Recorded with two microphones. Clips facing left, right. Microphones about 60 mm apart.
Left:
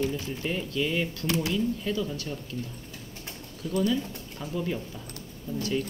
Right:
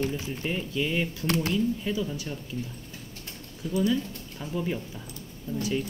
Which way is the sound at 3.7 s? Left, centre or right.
Centre.